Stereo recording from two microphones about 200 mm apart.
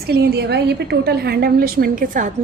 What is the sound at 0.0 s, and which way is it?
A woman's voice, 50° right (ahead or behind).